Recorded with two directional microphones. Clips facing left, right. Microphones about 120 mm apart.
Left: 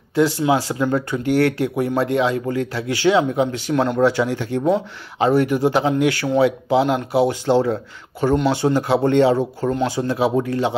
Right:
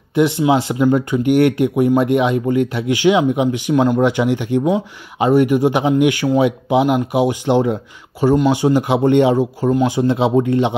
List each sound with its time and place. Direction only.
0.1 s speech: 20° right (ahead or behind)